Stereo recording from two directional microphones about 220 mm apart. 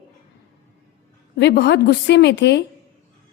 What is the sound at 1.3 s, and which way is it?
A woman's voice, 50° left (ahead or behind).